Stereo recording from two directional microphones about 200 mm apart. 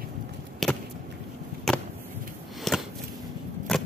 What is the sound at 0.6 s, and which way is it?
Chop, centre (ahead or behind).